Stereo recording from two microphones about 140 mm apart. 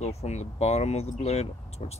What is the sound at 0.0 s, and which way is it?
Speech, 55° left (ahead or behind).